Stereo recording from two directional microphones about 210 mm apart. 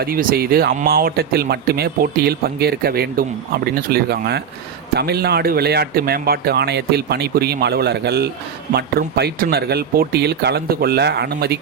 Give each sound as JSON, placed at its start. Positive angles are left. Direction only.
{"t": 0.0, "sound": "speech", "side_deg": -45}